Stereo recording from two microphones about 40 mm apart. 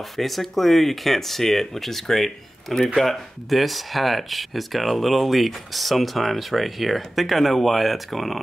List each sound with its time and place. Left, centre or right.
0.2 s speech: centre